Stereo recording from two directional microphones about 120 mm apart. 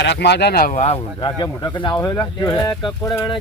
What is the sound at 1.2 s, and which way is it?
Speech, 40° left (ahead or behind).